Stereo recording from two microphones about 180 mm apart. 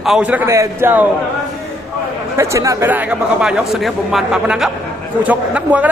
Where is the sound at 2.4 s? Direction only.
15° right (ahead or behind).